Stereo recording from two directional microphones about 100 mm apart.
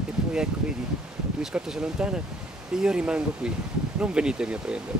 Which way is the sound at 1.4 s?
5° right (ahead or behind).